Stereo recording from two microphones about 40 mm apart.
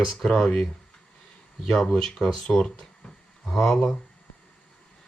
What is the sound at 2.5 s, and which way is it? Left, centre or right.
Speech, left.